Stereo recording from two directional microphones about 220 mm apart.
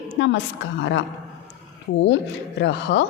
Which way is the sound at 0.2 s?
55° left (ahead or behind).